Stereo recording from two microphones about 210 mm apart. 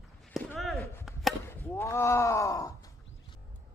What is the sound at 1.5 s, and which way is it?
Groan, 10° left (ahead or behind).